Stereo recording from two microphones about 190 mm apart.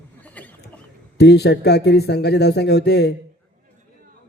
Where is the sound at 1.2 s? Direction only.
60° left (ahead or behind).